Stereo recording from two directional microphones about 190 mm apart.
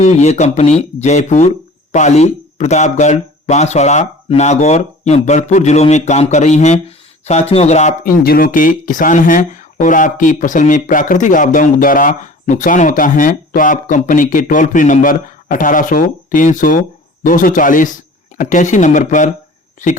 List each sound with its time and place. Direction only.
0.0 s speech: 35° left (ahead or behind)
8.2 s speech: 50° left (ahead or behind)